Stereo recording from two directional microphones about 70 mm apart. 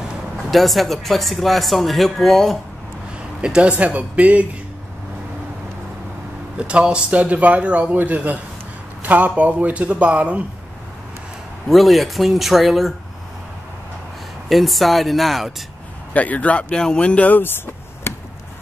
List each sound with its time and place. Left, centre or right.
0.5 s speech: centre
3.3 s a man's voice: centre
6.5 s a man's voice: centre
11.6 s speech: centre
14.5 s speech: centre
16.1 s speech: left
18.1 s chop: left